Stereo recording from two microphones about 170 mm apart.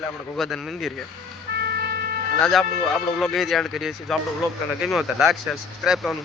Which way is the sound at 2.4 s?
Centre (ahead or behind).